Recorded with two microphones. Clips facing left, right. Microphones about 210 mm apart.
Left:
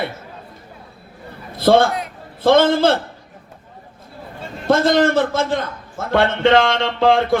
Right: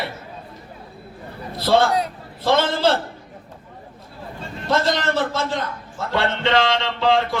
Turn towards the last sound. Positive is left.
turn(degrees=55)  # may be behind; listen again after turning